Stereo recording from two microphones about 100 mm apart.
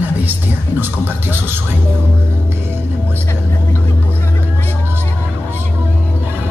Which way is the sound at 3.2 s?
25° left (ahead or behind).